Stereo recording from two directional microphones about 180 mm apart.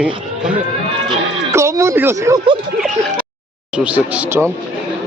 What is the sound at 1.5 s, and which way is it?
Speech, 15° right (ahead or behind).